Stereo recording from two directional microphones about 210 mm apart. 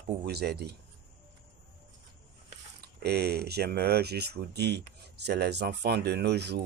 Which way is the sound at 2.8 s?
50° right (ahead or behind).